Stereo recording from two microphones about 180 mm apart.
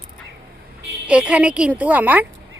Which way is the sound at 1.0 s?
5° right (ahead or behind).